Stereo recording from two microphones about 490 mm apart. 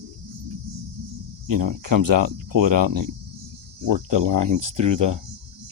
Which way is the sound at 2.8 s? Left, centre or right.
Right.